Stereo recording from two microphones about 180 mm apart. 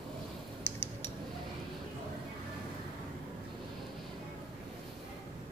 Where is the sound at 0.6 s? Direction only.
10° left (ahead or behind).